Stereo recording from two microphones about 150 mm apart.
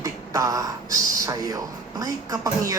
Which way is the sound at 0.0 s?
20° right (ahead or behind).